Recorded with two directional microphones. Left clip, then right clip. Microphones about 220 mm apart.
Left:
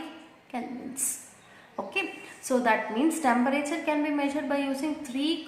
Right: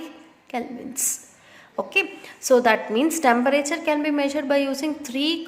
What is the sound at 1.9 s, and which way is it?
A woman's voice, 40° right (ahead or behind).